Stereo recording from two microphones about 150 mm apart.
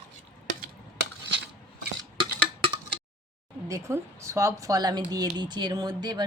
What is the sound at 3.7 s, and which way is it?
Speech, 20° right (ahead or behind).